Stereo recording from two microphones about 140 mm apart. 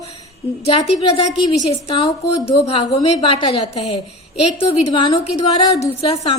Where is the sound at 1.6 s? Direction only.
45° left (ahead or behind).